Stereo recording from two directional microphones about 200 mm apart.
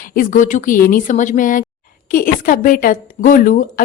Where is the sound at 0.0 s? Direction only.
45° left (ahead or behind).